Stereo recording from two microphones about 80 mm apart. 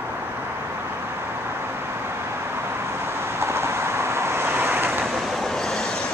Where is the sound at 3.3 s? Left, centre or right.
Right.